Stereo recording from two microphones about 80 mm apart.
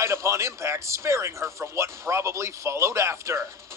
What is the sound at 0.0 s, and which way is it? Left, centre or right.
Speech, right.